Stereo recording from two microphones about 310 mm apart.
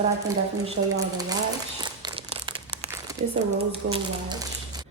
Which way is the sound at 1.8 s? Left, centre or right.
Centre.